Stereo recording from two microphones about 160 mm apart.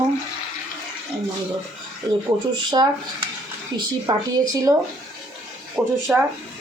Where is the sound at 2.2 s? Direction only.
25° right (ahead or behind).